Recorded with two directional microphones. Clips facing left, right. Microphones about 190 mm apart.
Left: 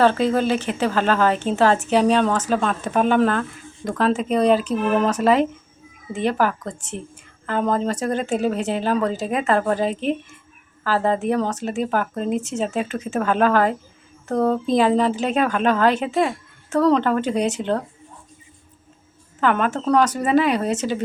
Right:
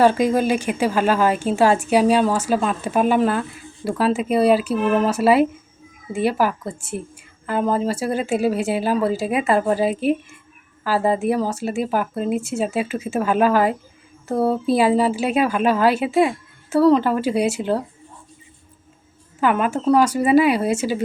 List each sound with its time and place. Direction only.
0.0 s a woman's voice: 10° right (ahead or behind)
19.4 s a woman's voice: 10° right (ahead or behind)